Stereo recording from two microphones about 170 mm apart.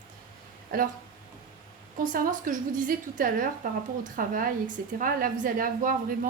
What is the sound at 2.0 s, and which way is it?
A woman's voice, 55° right (ahead or behind).